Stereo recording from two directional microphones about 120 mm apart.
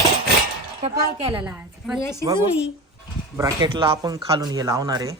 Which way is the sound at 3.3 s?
30° right (ahead or behind).